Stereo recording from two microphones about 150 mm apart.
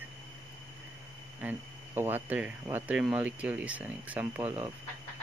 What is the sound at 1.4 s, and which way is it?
Speech, 15° right (ahead or behind).